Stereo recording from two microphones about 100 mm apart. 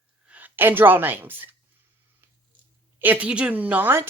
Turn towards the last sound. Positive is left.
turn(degrees=-20)  # may be behind; listen again after turning